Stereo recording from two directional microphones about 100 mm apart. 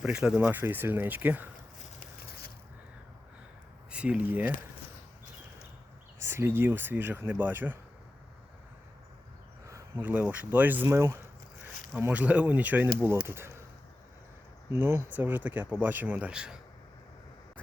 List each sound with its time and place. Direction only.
0.1 s speech: 5° right (ahead or behind)
0.3 s speech: 20° right (ahead or behind)
3.9 s speech: 10° right (ahead or behind)
6.1 s speech: 25° right (ahead or behind)
9.6 s a sound: 30° right (ahead or behind)
10.0 s speech: 15° right (ahead or behind)
10.8 s speech: 25° right (ahead or behind)
14.7 s speech: 25° right (ahead or behind); by 16.6 s 10° right (ahead or behind)